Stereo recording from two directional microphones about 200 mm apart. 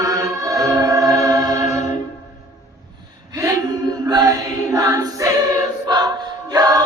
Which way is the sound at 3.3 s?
15° right (ahead or behind).